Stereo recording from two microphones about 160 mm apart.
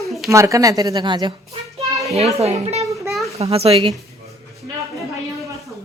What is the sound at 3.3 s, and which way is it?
Speech, 40° right (ahead or behind).